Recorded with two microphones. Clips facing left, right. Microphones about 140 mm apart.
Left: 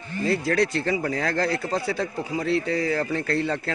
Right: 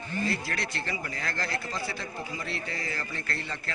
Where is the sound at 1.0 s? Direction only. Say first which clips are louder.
Left 10 dB; 75° left (ahead or behind).